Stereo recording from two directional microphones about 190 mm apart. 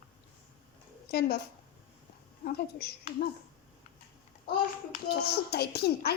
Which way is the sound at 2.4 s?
55° left (ahead or behind).